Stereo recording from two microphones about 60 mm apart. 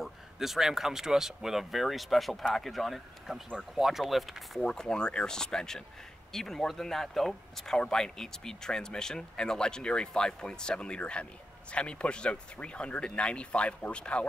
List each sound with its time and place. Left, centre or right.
0.0 s speech: centre
4.6 s speech: centre